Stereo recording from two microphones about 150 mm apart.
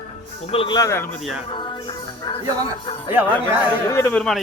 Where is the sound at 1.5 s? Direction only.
35° left (ahead or behind).